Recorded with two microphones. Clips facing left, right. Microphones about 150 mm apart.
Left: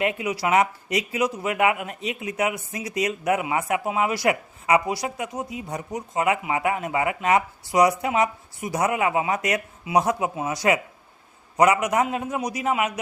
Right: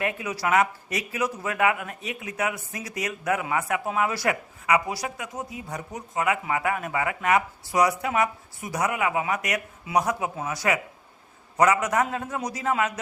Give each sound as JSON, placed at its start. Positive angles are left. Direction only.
{"t": 0.0, "sound": "a man's voice", "side_deg": 20}